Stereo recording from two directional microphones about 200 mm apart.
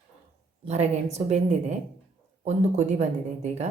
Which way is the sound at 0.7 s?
35° right (ahead or behind).